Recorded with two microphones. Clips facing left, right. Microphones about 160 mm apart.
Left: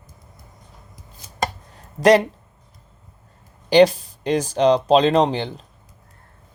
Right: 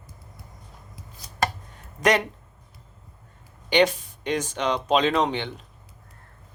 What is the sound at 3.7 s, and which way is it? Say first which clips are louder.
Speech: left 7 dB; 35° left (ahead or behind).